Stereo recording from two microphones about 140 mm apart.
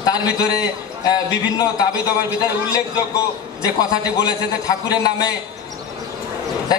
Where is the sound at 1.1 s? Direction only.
25° left (ahead or behind).